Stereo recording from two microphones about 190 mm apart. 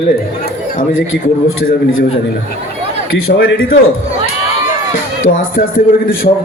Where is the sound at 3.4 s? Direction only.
70° left (ahead or behind).